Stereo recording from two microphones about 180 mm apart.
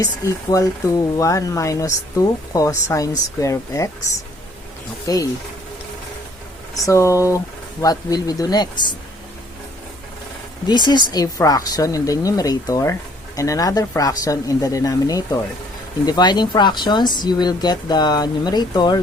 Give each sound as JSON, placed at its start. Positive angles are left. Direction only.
{"t": 0.0, "sound": "speech", "side_deg": 20}
{"t": 5.0, "sound": "speech", "side_deg": 20}
{"t": 6.8, "sound": "speech", "side_deg": 15}
{"t": 10.7, "sound": "speech", "side_deg": 25}